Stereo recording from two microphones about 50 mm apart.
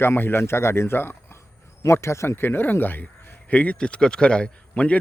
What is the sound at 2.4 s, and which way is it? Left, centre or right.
Speech, left.